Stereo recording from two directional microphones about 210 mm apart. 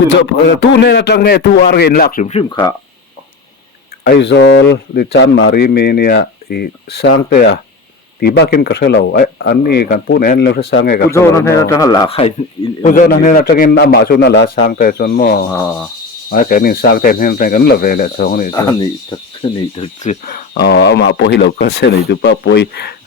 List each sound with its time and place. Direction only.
0.1 s speech: 60° left (ahead or behind); by 2.6 s 30° left (ahead or behind)
4.0 s speech: 55° left (ahead or behind)
11.1 s a man's voice: 15° left (ahead or behind)
12.8 s a man's voice: 40° left (ahead or behind)
15.5 s a man's voice: 15° left (ahead or behind)
16.3 s speech: 40° left (ahead or behind)
18.5 s speech: 20° left (ahead or behind); by 23.0 s 50° left (ahead or behind)